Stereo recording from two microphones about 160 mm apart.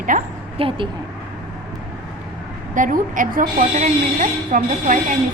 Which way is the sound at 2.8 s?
55° right (ahead or behind).